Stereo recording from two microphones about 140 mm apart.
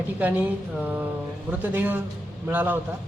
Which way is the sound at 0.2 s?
10° right (ahead or behind).